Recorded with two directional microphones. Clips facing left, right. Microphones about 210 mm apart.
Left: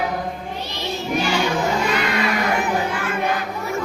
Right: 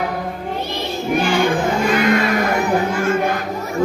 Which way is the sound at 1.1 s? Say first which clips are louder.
Right 4 dB; 55° right (ahead or behind).